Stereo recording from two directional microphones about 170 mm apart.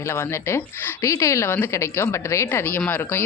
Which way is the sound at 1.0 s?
20° left (ahead or behind).